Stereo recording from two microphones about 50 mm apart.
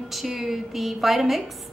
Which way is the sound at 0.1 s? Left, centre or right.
Centre.